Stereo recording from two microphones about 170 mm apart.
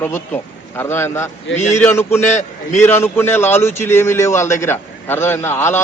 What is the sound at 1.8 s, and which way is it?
A man's voice, 15° left (ahead or behind).